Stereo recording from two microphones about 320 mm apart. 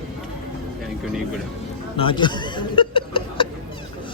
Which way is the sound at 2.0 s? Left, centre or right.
Centre.